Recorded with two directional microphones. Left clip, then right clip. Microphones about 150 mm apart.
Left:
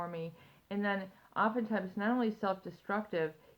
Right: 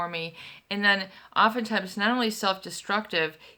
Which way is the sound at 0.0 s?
20° right (ahead or behind).